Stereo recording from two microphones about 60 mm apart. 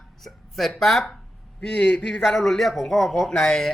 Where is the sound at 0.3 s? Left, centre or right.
Centre.